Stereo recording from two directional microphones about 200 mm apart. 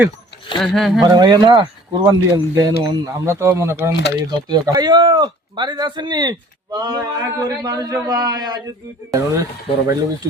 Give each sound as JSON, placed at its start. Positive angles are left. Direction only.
{"t": 0.6, "sound": "speech", "side_deg": 0}
{"t": 1.0, "sound": "speech", "side_deg": -20}